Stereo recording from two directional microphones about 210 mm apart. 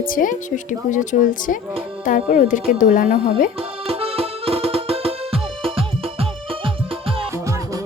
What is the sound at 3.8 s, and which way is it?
Music, 25° right (ahead or behind).